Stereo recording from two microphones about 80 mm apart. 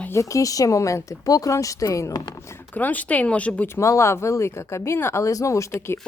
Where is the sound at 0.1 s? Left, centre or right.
Left.